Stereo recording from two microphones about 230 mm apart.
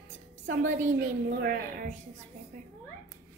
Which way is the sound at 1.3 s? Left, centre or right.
Right.